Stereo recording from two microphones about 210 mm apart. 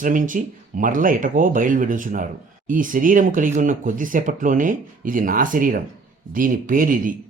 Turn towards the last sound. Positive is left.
turn(degrees=-40)  # may be behind; listen again after turning